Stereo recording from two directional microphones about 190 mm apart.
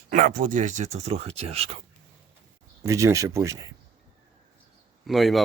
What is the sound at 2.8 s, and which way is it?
Speech, 15° right (ahead or behind).